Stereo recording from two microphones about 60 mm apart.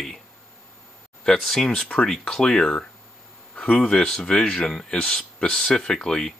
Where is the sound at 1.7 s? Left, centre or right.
Centre.